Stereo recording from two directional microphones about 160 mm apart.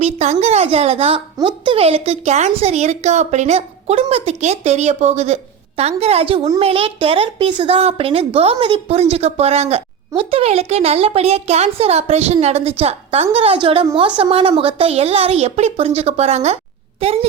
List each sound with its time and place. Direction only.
0.0 s a woman's voice: 45° right (ahead or behind)